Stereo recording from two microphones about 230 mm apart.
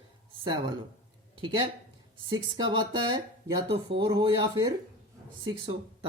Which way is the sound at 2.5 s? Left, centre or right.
Centre.